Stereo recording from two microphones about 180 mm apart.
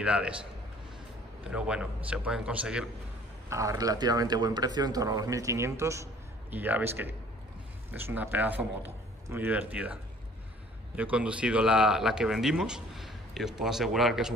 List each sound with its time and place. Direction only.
0.0 s speech: 5° right (ahead or behind)
1.5 s speech: 5° right (ahead or behind)
3.4 s a man's voice: 15° right (ahead or behind)
11.0 s speech: 5° right (ahead or behind)